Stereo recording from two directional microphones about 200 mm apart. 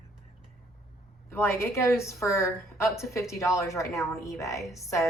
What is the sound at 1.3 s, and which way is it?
A woman's voice, 10° left (ahead or behind).